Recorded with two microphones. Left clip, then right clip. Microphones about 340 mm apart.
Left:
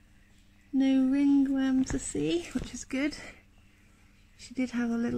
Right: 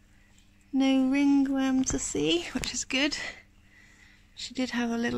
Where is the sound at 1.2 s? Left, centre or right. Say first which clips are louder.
Right 1 dB; right.